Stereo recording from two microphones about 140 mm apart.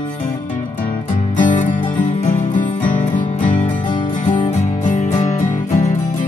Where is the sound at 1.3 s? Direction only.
65° left (ahead or behind).